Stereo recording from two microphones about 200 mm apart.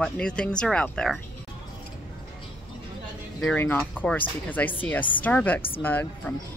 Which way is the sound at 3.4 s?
10° left (ahead or behind).